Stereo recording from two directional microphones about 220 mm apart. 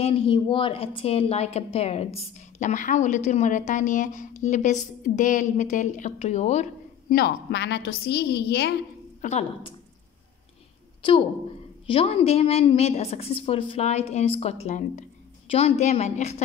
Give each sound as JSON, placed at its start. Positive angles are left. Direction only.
{"t": 0.0, "sound": "a woman's voice", "side_deg": 25}
{"t": 9.2, "sound": "a woman's voice", "side_deg": 30}
{"t": 11.0, "sound": "a woman's voice", "side_deg": 20}